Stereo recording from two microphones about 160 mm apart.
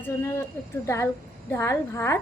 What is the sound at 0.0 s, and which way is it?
A woman's voice, 15° left (ahead or behind).